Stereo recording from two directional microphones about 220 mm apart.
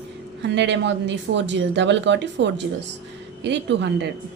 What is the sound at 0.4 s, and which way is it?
Speech, 50° right (ahead or behind).